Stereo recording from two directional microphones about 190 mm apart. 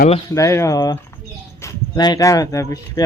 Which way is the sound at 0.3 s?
15° left (ahead or behind).